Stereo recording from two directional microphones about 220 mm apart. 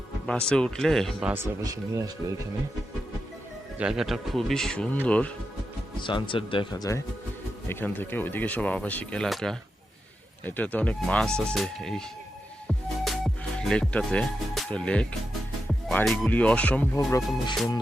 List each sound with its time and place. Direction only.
0.4 s speech: 5° left (ahead or behind)
1.3 s speech: 15° right (ahead or behind)
3.8 s speech: 5° right (ahead or behind)
6.0 s speech: 20° left (ahead or behind); by 12.0 s centre (ahead or behind)
12.6 s music: centre (ahead or behind)
15.9 s speech: 5° left (ahead or behind)